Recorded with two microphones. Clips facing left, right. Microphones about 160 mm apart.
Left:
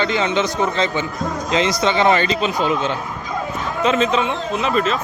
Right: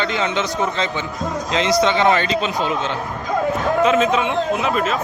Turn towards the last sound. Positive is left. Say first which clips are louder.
# even
turn(degrees=-5)  # may be behind; listen again after turning